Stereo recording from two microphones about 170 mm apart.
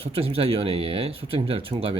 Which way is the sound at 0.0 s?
35° right (ahead or behind).